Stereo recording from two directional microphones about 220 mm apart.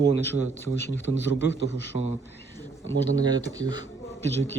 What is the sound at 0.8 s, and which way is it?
A man's voice, 50° left (ahead or behind).